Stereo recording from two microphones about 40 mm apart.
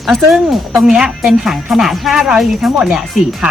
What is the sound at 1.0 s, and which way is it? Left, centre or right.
A woman's voice, centre.